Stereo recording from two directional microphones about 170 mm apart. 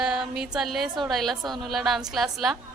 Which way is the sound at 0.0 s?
5° right (ahead or behind).